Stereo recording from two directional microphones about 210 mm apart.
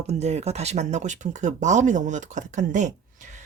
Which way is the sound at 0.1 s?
30° right (ahead or behind).